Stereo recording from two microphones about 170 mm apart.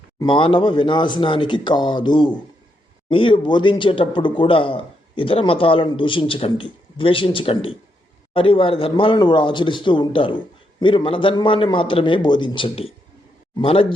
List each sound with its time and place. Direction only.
0.2 s speech: 30° left (ahead or behind)